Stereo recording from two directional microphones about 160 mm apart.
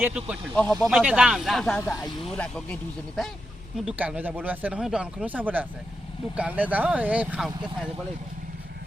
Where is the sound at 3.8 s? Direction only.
5° right (ahead or behind).